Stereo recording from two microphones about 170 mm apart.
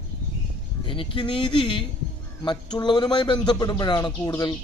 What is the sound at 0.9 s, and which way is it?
A man's voice, 30° left (ahead or behind).